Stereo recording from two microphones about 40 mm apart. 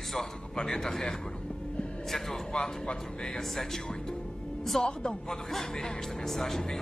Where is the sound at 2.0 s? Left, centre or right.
Centre.